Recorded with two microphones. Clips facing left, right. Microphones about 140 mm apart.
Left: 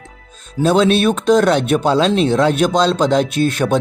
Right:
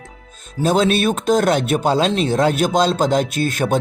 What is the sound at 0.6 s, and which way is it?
Speech, 45° right (ahead or behind).